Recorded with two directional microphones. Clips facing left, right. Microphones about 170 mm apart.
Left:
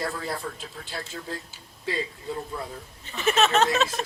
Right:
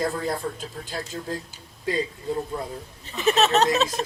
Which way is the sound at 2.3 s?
20° right (ahead or behind).